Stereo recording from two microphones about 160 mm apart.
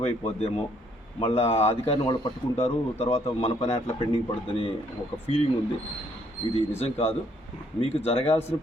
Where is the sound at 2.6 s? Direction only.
40° left (ahead or behind).